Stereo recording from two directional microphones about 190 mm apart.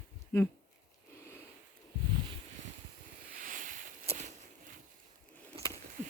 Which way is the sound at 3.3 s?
45° right (ahead or behind).